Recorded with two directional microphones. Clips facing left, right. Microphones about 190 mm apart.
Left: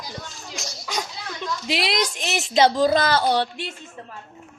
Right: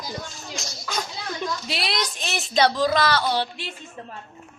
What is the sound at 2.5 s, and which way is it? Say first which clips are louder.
Speech: left 3 dB; 25° left (ahead or behind).